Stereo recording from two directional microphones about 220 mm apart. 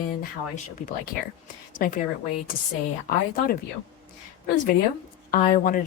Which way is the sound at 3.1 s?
40° left (ahead or behind).